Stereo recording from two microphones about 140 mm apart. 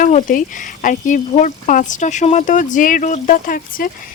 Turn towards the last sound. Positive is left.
turn(degrees=85)